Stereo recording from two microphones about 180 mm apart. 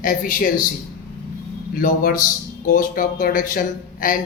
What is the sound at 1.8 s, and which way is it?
Speech, 50° left (ahead or behind).